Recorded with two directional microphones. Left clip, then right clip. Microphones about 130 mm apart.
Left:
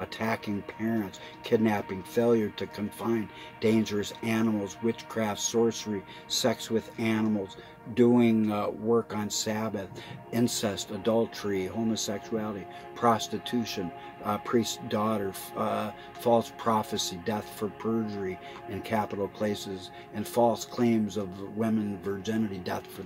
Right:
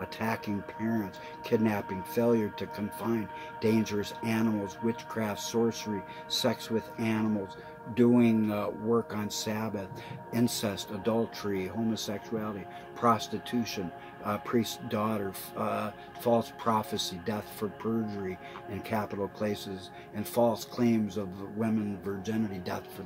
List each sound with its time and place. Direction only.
0.2 s speech: 15° left (ahead or behind)